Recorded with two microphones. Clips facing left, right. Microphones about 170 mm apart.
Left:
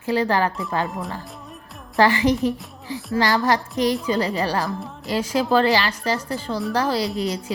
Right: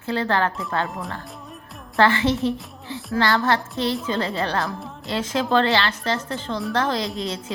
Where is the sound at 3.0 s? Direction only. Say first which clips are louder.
Left 1 dB; centre (ahead or behind).